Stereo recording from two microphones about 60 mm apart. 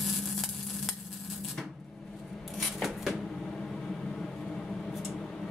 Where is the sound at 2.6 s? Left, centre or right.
Centre.